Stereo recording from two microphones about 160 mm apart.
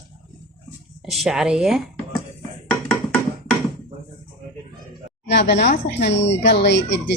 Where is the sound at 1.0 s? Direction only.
Centre (ahead or behind).